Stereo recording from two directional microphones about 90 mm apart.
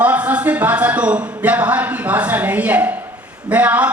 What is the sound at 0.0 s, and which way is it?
A man's voice, 15° right (ahead or behind).